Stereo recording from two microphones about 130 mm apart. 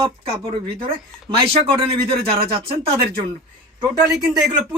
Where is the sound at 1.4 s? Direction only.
45° right (ahead or behind).